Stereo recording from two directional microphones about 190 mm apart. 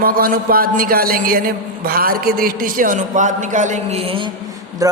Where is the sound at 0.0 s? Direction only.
50° right (ahead or behind).